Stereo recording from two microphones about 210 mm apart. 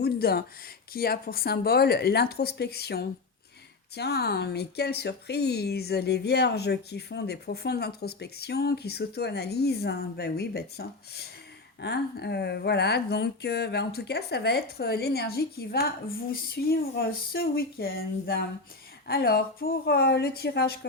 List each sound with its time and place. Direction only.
0.0 s speech: 45° left (ahead or behind)